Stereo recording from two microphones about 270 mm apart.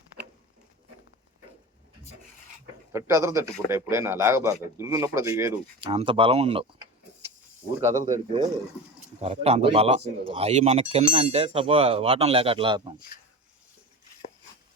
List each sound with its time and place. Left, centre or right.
2.9 s a man's voice: centre